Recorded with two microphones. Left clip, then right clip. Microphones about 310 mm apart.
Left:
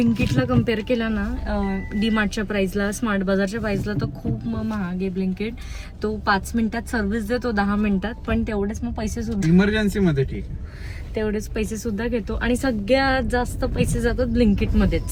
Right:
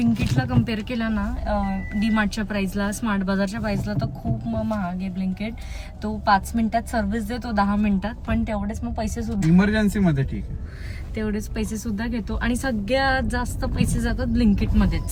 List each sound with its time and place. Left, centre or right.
0.3 s a woman's voice: centre
9.6 s speech: right
11.1 s a woman's voice: centre